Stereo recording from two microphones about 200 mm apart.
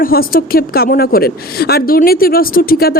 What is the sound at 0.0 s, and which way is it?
A woman's voice, 45° left (ahead or behind).